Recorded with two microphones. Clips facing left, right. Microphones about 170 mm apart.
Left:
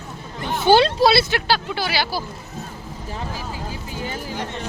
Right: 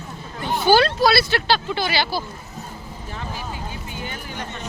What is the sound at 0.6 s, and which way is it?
Speech, 25° left (ahead or behind).